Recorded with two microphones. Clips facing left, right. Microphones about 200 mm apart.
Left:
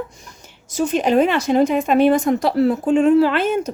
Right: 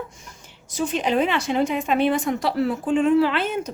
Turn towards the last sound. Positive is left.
turn(degrees=45)  # may be behind; listen again after turning